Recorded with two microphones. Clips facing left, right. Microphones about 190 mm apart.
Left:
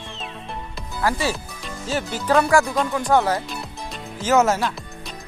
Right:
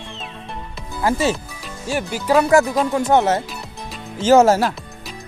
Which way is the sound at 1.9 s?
10° right (ahead or behind).